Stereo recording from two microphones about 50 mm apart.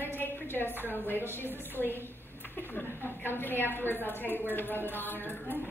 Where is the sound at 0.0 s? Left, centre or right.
Left.